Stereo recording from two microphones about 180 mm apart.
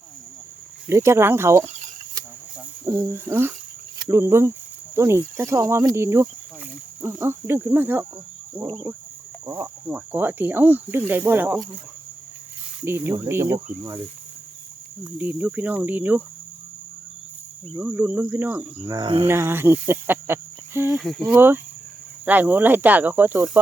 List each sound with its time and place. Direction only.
0.9 s speech: 15° right (ahead or behind)
2.8 s speech: 15° right (ahead or behind)
8.6 s cricket: 25° right (ahead or behind)
9.5 s speech: 10° right (ahead or behind)
12.8 s speech: 10° right (ahead or behind)
15.0 s speech: 10° right (ahead or behind)
17.7 s speech: 10° right (ahead or behind)
18.9 s cricket: 25° right (ahead or behind)
19.3 s speech: 15° right (ahead or behind)
20.9 s speech: centre (ahead or behind)